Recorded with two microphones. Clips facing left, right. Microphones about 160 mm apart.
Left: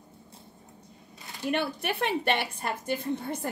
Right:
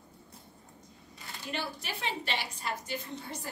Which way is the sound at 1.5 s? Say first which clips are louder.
Left 9 dB; 60° left (ahead or behind).